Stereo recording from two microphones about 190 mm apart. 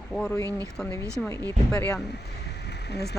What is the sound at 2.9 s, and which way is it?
Speech, 60° left (ahead or behind).